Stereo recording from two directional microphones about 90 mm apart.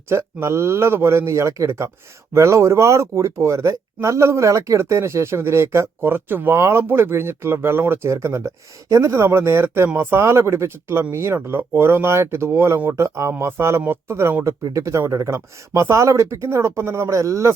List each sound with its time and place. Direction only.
0.1 s speech: 30° right (ahead or behind)